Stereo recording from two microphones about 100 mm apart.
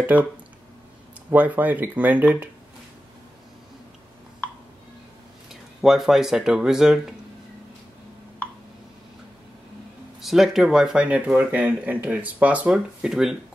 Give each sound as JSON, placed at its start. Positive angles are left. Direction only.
{"t": 0.0, "sound": "speech", "side_deg": -15}
{"t": 1.3, "sound": "speech", "side_deg": -15}
{"t": 5.5, "sound": "speech", "side_deg": -5}
{"t": 10.2, "sound": "speech", "side_deg": 0}